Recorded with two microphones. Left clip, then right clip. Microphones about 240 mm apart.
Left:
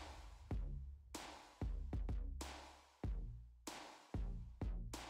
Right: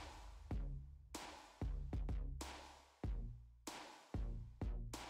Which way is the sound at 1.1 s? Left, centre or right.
Centre.